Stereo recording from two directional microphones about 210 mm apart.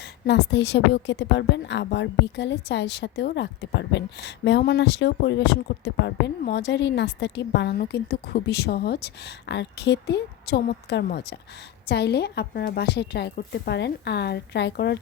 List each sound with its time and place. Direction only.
0.3 s a woman's voice: 55° left (ahead or behind)